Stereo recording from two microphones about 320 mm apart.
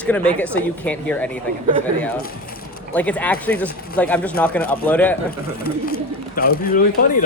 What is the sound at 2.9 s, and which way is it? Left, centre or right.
Speech, centre.